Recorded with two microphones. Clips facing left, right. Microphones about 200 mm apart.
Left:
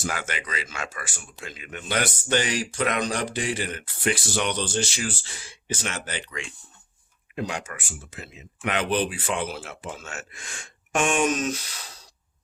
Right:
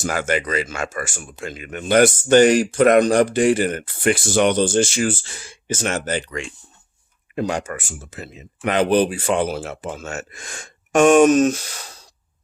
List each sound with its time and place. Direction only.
0.0 s speech: 45° right (ahead or behind)